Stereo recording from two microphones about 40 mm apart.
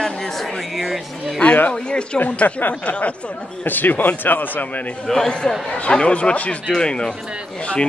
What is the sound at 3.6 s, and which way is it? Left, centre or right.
Speech, left.